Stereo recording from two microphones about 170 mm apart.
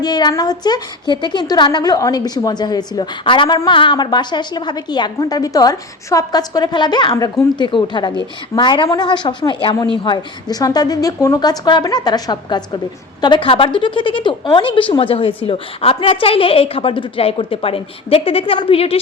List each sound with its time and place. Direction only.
0.0 s a woman's voice: 25° left (ahead or behind)